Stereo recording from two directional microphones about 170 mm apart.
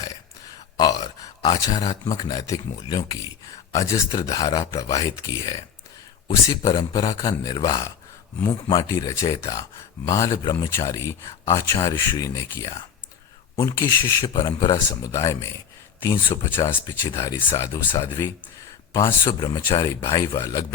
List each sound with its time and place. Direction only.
0.8 s speech: 25° left (ahead or behind)
18.9 s speech: 25° left (ahead or behind)